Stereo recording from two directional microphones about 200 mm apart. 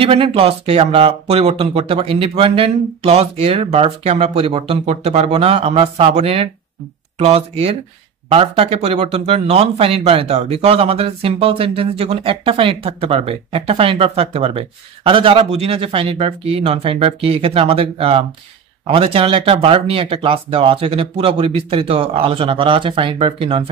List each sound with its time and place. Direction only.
0.0 s speech: 25° right (ahead or behind)